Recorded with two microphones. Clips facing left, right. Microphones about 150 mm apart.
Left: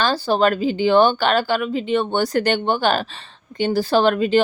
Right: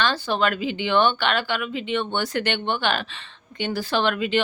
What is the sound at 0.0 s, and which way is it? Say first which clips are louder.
Speech: left 5 dB; 35° left (ahead or behind).